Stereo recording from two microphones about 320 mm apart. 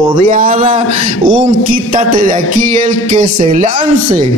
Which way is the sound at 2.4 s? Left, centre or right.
Left.